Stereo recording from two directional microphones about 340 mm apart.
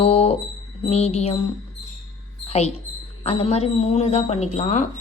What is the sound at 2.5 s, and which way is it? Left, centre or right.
Speech, centre.